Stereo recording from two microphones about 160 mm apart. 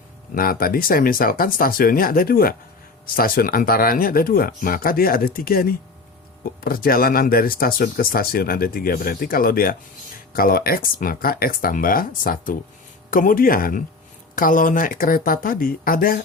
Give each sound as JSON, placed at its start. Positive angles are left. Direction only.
{"t": 0.3, "sound": "speech", "side_deg": 65}